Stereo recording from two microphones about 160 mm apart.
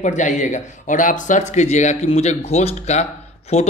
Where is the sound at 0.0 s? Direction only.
50° left (ahead or behind).